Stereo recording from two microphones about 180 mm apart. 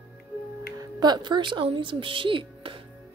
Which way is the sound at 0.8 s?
25° right (ahead or behind).